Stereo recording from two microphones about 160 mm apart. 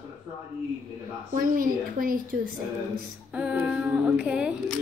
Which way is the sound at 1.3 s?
60° right (ahead or behind).